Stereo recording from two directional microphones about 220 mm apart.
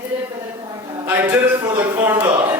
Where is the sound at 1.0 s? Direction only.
10° right (ahead or behind).